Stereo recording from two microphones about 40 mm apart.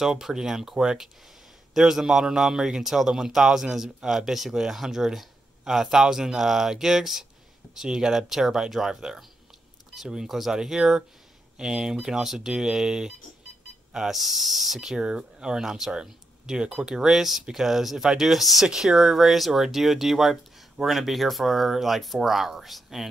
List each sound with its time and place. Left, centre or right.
0.0 s a man's voice: centre
18.7 s a man's voice: centre